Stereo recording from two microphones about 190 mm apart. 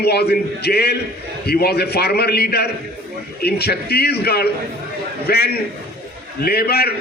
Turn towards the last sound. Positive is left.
turn(degrees=55)  # may be behind; listen again after turning